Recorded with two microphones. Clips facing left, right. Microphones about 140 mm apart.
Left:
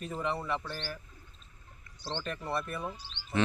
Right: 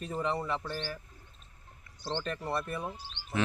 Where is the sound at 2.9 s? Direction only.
50° right (ahead or behind).